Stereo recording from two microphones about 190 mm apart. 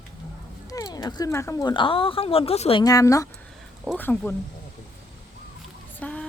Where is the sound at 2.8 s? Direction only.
20° left (ahead or behind).